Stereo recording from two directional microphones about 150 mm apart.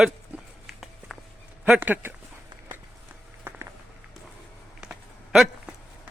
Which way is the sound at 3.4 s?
15° right (ahead or behind).